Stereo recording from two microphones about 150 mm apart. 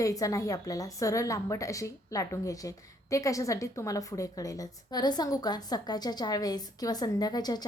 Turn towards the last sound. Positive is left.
turn(degrees=25)  # may be behind; listen again after turning